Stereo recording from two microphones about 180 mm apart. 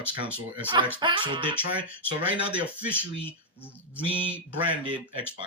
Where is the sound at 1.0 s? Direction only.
25° right (ahead or behind).